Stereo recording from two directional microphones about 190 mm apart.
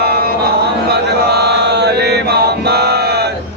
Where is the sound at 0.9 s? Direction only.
60° right (ahead or behind).